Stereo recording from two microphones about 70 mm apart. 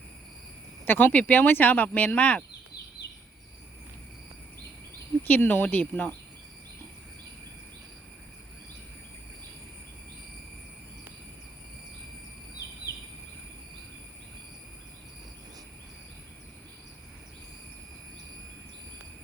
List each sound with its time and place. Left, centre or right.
0.9 s speech: left
5.2 s speech: left